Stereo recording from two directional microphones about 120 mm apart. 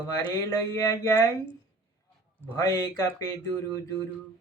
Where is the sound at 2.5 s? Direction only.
25° left (ahead or behind).